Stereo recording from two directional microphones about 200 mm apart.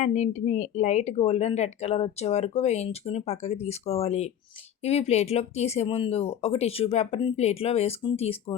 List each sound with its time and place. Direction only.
0.0 s a woman's voice: 35° left (ahead or behind)